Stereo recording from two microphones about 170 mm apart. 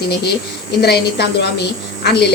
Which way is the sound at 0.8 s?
75° left (ahead or behind).